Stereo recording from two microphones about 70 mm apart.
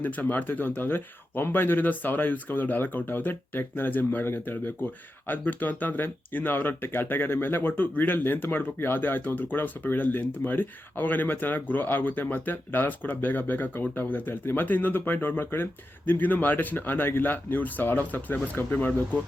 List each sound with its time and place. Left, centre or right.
0.0 s speech: left